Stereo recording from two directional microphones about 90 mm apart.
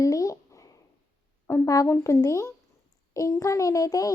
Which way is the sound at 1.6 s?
40° left (ahead or behind).